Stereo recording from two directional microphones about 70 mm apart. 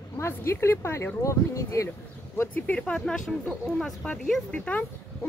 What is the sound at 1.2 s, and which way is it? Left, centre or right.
Speech, left.